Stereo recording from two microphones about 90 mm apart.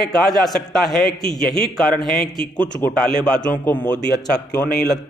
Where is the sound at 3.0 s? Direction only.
5° left (ahead or behind).